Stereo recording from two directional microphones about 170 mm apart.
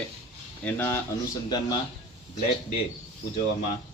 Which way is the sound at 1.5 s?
25° left (ahead or behind).